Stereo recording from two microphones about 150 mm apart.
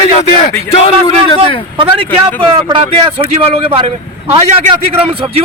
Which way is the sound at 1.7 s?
35° right (ahead or behind).